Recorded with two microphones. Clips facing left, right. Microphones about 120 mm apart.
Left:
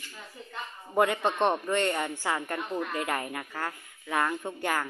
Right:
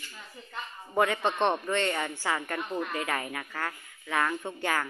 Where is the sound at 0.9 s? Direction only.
10° left (ahead or behind).